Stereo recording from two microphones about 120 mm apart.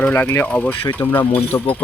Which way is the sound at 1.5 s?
30° left (ahead or behind).